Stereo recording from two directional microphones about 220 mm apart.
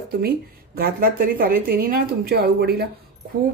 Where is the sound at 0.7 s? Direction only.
45° right (ahead or behind).